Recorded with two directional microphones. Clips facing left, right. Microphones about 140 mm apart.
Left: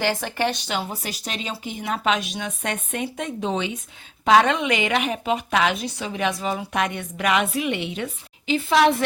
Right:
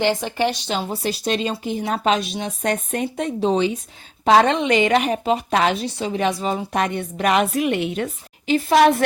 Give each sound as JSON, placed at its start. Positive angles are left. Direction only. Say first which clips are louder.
{"t": 0.0, "sound": "speech", "louder": "right 3 dB", "side_deg": -20}
{"t": 0.7, "sound": "a woman's voice", "louder": "right 4 dB", "side_deg": -30}